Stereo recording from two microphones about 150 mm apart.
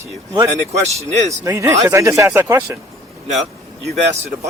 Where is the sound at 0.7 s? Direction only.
50° right (ahead or behind).